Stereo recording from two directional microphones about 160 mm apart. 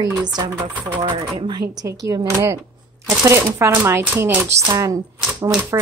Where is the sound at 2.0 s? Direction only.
15° right (ahead or behind).